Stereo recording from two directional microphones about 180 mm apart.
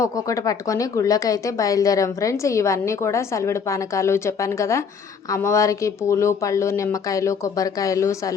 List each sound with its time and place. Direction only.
0.0 s speech: 20° left (ahead or behind)